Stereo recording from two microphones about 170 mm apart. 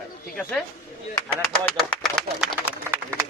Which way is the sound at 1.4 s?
5° left (ahead or behind).